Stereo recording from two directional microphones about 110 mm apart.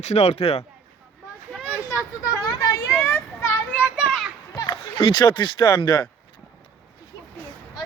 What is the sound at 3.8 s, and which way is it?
Children playing, 10° right (ahead or behind).